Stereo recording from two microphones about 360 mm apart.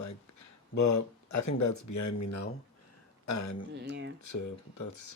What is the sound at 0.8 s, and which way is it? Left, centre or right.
Speech, left.